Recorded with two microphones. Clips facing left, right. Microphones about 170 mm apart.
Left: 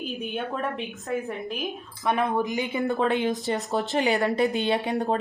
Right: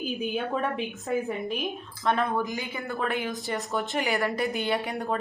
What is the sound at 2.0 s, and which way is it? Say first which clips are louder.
A woman's voice: left 2 dB; 20° left (ahead or behind).